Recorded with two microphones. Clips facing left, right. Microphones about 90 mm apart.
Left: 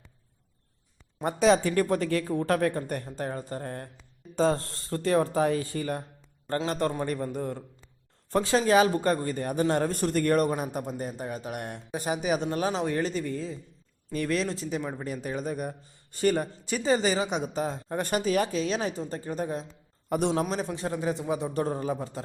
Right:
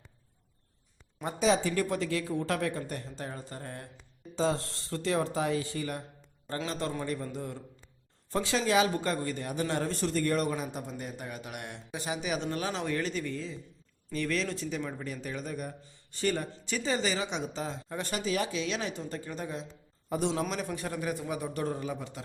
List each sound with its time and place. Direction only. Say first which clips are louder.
1.2 s speech: left 5 dB; 60° left (ahead or behind)
1.8 s speech: left 5 dB; 45° left (ahead or behind)
6.7 s speech: left 4 dB; 50° left (ahead or behind)
20.1 s a man's voice: left 4 dB; 70° left (ahead or behind)
20.5 s speech: left 4 dB; 30° left (ahead or behind)